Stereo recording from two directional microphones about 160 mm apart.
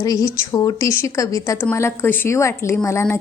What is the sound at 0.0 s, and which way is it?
A woman's voice, 25° left (ahead or behind).